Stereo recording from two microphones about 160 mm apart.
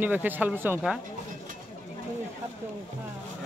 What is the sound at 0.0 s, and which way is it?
Speech, 10° right (ahead or behind).